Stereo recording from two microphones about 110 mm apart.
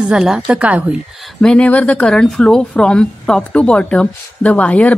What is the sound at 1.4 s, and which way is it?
Speech, 10° left (ahead or behind).